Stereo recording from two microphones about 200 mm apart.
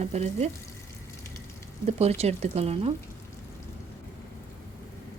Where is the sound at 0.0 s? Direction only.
35° right (ahead or behind).